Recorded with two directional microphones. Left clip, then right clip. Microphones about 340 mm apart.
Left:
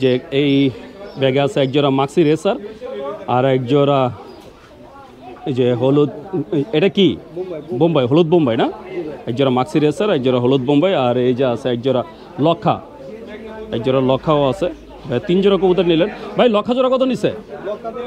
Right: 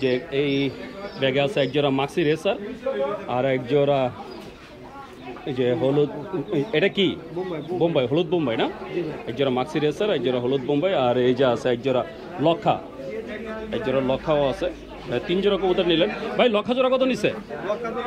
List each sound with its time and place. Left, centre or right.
0.0 s speech: left
5.5 s speech: left
13.8 s speech: left; by 17.3 s centre